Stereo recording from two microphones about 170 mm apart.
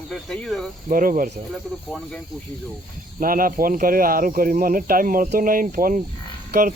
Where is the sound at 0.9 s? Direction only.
55° right (ahead or behind).